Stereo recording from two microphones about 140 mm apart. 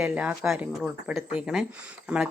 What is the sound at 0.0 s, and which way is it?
Speech, 10° right (ahead or behind).